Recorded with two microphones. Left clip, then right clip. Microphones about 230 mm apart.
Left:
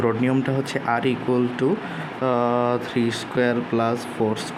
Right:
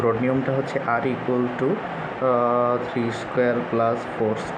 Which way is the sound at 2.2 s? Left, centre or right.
Left.